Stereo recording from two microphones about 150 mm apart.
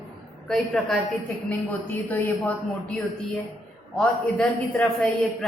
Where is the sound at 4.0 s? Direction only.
5° left (ahead or behind).